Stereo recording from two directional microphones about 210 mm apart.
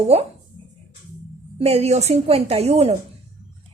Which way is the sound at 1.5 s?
30° right (ahead or behind).